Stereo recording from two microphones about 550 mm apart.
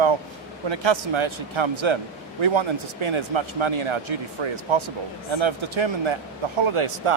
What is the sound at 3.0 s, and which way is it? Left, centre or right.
Speech, right.